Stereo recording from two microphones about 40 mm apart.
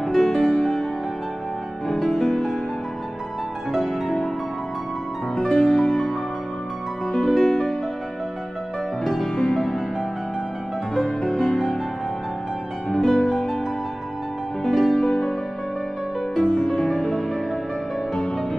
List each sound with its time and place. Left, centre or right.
0.1 s music: centre
2.0 s music: centre
3.7 s music: centre
5.3 s music: centre
7.3 s music: centre
9.0 s music: centre
11.1 s music: centre
11.5 s music: centre
13.0 s music: centre
14.6 s music: centre
16.4 s music: centre